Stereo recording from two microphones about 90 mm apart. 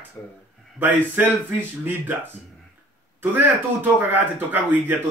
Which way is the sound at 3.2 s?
25° right (ahead or behind).